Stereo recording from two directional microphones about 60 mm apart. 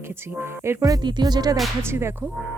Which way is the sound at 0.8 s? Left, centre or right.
Right.